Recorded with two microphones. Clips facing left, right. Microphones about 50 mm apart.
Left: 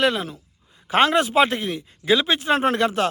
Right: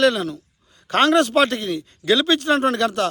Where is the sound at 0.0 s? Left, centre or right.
Centre.